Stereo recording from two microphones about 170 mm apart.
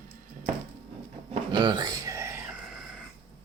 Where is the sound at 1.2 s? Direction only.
30° right (ahead or behind).